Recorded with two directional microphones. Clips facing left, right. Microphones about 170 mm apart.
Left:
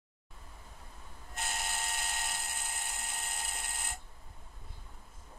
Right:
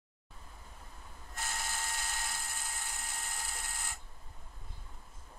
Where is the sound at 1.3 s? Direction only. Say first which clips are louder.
Left 2 dB; 25° left (ahead or behind).